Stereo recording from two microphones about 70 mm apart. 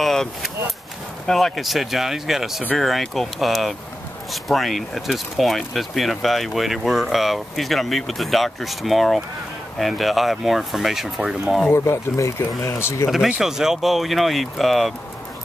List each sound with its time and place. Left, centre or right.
0.0 s speech: centre
11.7 s speech: left
12.4 s speech: left
13.4 s speech: centre